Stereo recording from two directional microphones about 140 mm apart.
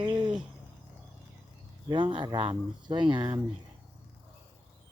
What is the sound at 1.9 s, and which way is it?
Speech, 35° right (ahead or behind).